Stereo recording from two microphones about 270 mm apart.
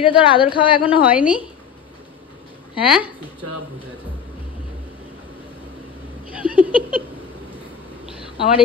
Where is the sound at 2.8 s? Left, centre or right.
Centre.